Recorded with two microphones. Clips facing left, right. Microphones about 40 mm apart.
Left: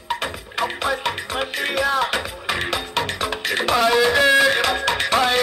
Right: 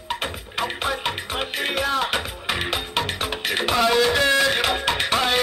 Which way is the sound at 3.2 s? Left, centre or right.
Right.